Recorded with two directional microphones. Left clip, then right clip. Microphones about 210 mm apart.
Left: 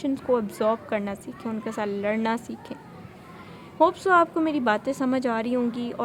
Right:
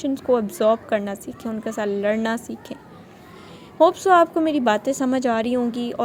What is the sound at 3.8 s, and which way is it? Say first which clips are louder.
A woman's voice: right 4 dB; 15° right (ahead or behind).